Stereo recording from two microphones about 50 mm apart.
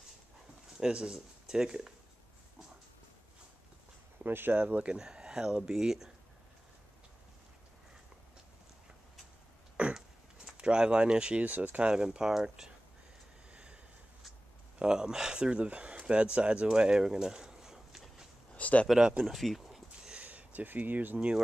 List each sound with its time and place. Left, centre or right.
0.7 s speech: centre
4.2 s speech: right
4.6 s speech: right
4.9 s speech: centre
9.8 s a sound: right
10.6 s speech: centre
11.9 s speech: centre
13.5 s a sound: centre
14.8 s speech: centre
18.5 s a sound: left
18.9 s speech: centre
19.2 s speech: centre
20.2 s a sound: right